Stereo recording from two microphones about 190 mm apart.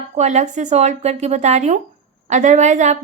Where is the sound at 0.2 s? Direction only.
35° right (ahead or behind).